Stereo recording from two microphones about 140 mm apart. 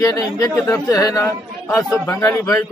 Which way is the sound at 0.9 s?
25° left (ahead or behind).